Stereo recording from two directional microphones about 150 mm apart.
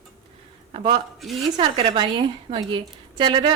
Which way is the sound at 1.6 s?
35° right (ahead or behind).